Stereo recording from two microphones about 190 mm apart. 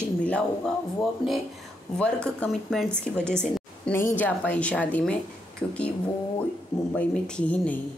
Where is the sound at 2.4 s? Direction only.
5° left (ahead or behind).